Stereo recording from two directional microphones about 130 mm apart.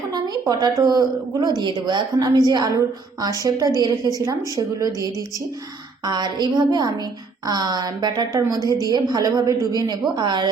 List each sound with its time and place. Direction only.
0.1 s a sound: 30° right (ahead or behind)
0.8 s a woman's voice: 30° right (ahead or behind)
6.1 s a woman's voice: 35° right (ahead or behind)